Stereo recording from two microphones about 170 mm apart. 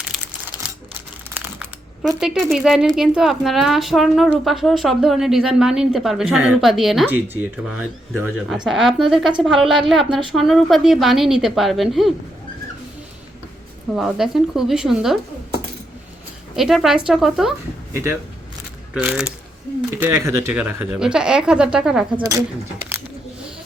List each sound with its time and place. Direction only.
0.0 s typing: 5° right (ahead or behind)
2.2 s a woman's voice: centre (ahead or behind)
7.3 s a woman's voice: 10° right (ahead or behind)
13.9 s a woman's voice: centre (ahead or behind)
16.6 s a woman's voice: centre (ahead or behind)
17.9 s a woman's voice: 15° right (ahead or behind)
20.0 s speech: 15° right (ahead or behind)
20.5 s a woman's voice: 5° right (ahead or behind)
22.2 s speech: 20° right (ahead or behind)